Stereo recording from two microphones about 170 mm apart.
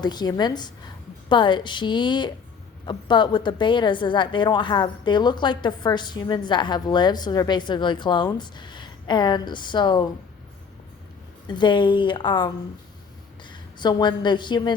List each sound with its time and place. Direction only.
0.0 s a woman's voice: 25° left (ahead or behind)
11.4 s a woman's voice: 25° left (ahead or behind)